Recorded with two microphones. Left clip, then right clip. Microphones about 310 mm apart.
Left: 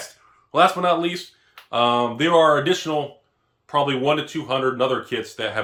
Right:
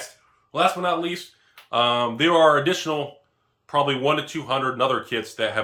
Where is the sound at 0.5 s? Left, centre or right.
Centre.